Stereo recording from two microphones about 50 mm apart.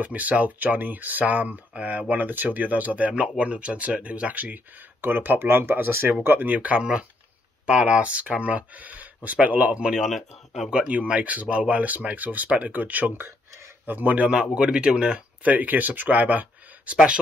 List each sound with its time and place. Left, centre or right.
0.0 s speech: right
5.0 s speech: right
6.2 s speech: right
9.8 s speech: centre
10.0 s speech: centre
10.7 s speech: right
14.3 s speech: right